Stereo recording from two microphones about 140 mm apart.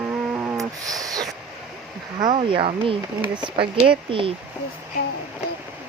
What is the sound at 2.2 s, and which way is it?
Speech, 40° right (ahead or behind).